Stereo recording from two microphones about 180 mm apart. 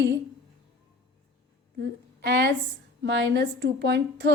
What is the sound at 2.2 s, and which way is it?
A woman's voice, 70° right (ahead or behind).